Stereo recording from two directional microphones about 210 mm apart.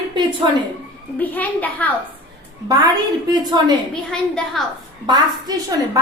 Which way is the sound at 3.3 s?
20° right (ahead or behind).